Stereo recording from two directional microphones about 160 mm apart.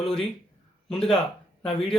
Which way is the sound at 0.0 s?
Centre (ahead or behind).